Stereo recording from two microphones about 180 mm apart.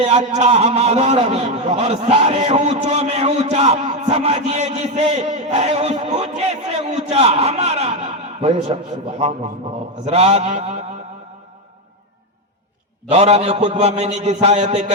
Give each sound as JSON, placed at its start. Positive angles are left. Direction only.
{"t": 0.0, "sound": "a man's voice", "side_deg": -35}
{"t": 13.1, "sound": "a man's voice", "side_deg": -35}